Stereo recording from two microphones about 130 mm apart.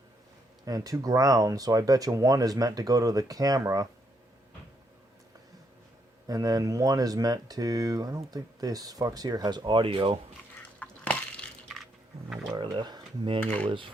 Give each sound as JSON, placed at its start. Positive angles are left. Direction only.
{"t": 0.6, "sound": "speech", "side_deg": -25}
{"t": 6.2, "sound": "speech", "side_deg": -30}
{"t": 10.8, "sound": "a sound", "side_deg": 10}
{"t": 12.5, "sound": "speech", "side_deg": -35}
{"t": 13.4, "sound": "speech", "side_deg": 10}
{"t": 13.7, "sound": "speech", "side_deg": -40}